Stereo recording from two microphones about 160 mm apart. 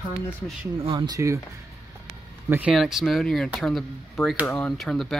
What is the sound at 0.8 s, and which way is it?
Speech, 30° right (ahead or behind).